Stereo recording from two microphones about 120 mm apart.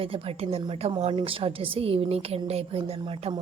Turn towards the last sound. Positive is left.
turn(degrees=-55)  # may be behind; listen again after turning